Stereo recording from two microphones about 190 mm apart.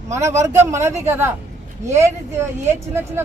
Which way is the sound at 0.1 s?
15° right (ahead or behind).